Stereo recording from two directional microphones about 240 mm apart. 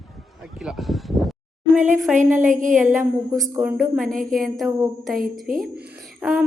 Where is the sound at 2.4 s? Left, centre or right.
Right.